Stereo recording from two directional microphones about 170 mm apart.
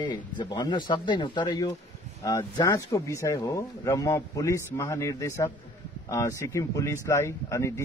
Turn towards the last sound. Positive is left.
turn(degrees=15)  # may be behind; listen again after turning